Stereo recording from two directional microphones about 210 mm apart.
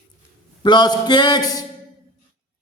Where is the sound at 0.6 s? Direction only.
20° left (ahead or behind).